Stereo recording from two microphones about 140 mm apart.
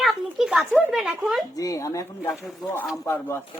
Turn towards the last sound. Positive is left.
turn(degrees=15)  # may be behind; listen again after turning